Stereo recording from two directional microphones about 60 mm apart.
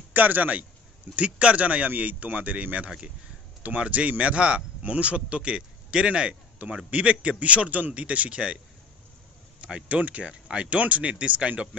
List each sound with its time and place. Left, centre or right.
0.1 s speech: right
9.6 s speech: centre